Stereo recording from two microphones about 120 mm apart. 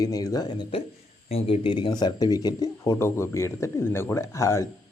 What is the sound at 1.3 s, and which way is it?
Speech, 55° left (ahead or behind).